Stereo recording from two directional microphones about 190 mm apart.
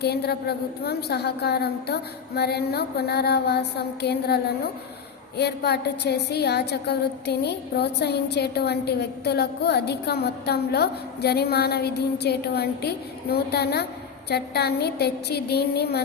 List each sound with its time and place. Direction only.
0.0 s a woman's voice: 60° left (ahead or behind)